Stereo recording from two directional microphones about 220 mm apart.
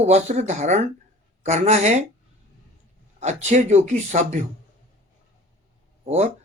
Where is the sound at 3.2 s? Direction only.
30° right (ahead or behind).